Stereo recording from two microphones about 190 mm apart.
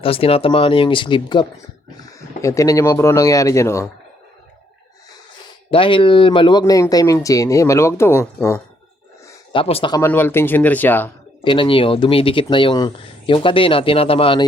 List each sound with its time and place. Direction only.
0.0 s speech: 30° left (ahead or behind)
5.7 s speech: 25° left (ahead or behind)
9.5 s speech: 30° left (ahead or behind)
9.9 s speech: 10° left (ahead or behind)
11.4 s speech: 25° left (ahead or behind)